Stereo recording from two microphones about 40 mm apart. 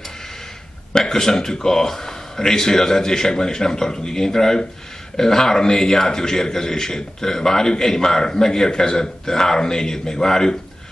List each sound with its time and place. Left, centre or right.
0.9 s a man's voice: centre